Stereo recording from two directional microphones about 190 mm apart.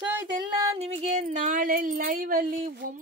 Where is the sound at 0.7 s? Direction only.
35° right (ahead or behind).